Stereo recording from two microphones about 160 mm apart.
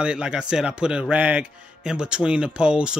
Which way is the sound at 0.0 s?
5° right (ahead or behind).